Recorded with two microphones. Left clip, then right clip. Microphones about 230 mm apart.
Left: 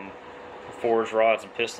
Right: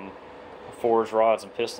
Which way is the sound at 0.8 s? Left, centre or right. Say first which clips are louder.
Right 1 dB; centre.